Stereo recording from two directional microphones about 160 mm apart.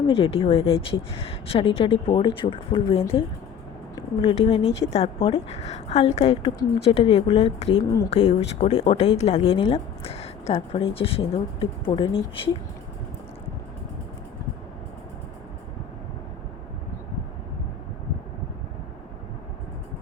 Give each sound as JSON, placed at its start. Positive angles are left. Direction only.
{"t": 0.1, "sound": "speech", "side_deg": 35}
{"t": 7.8, "sound": "speech", "side_deg": 20}
{"t": 8.1, "sound": "speech", "side_deg": 40}